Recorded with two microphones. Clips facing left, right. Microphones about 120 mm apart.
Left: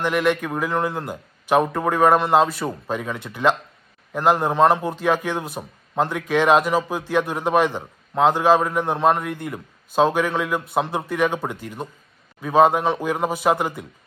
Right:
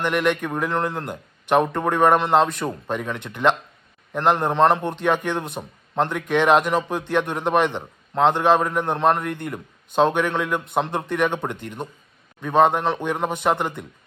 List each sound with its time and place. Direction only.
0.0 s a man's voice: 5° left (ahead or behind)